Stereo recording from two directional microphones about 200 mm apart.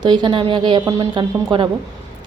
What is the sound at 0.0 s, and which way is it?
A woman's voice, 25° right (ahead or behind).